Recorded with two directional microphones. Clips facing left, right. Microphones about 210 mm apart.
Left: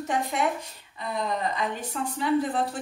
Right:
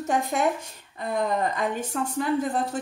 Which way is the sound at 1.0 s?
50° right (ahead or behind).